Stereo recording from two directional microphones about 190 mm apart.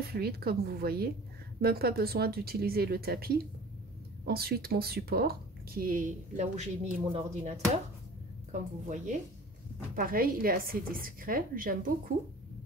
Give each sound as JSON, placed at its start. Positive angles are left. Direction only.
{"t": 0.0, "sound": "speech", "side_deg": -55}